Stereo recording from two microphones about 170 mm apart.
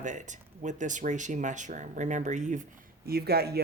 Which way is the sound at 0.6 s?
45° right (ahead or behind).